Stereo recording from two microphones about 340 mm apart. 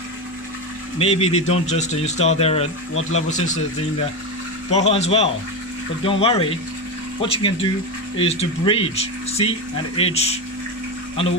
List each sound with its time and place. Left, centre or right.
0.9 s speech: centre
2.9 s speech: left
3.2 s speech: left
4.6 s speech: centre